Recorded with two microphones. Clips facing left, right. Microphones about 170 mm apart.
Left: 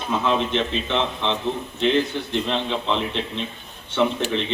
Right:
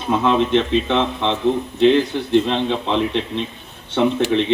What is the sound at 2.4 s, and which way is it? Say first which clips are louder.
Speech: right 4 dB; 60° right (ahead or behind).